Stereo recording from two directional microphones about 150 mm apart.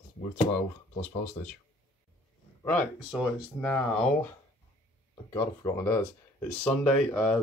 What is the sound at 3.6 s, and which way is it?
Speech, 10° left (ahead or behind).